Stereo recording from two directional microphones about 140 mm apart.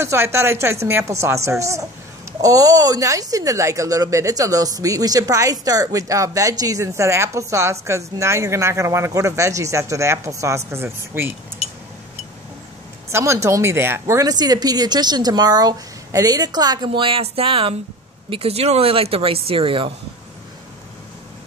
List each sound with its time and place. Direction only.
0.0 s speech: 20° right (ahead or behind)
11.6 s a sound: 45° left (ahead or behind)
13.1 s speech: 20° right (ahead or behind); by 19.9 s 40° right (ahead or behind)